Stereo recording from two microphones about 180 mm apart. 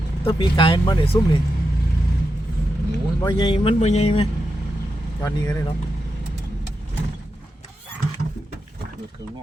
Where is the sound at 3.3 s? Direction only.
30° left (ahead or behind).